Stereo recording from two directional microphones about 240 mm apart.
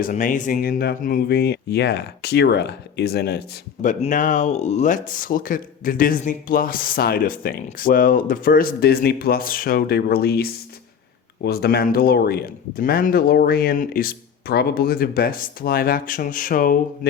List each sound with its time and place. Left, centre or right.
0.0 s speech: left